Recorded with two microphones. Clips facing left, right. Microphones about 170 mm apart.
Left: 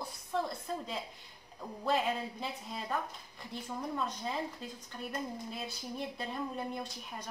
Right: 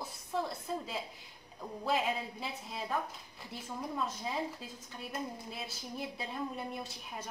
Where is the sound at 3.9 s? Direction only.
5° right (ahead or behind).